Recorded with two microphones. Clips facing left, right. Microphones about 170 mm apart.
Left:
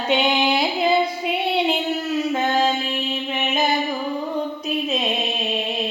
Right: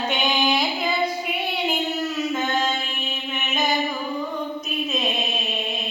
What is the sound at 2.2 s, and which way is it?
Child singing, 30° left (ahead or behind).